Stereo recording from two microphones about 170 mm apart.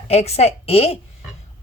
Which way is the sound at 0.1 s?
40° left (ahead or behind).